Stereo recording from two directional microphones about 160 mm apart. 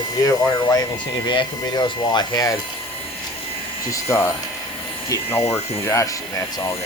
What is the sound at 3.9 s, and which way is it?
Speech, 15° left (ahead or behind).